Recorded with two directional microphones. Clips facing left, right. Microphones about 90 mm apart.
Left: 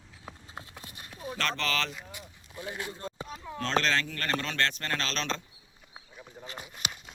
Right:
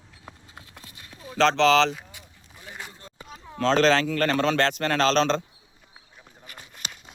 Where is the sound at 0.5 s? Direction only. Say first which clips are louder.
Left 2 dB; 25° left (ahead or behind).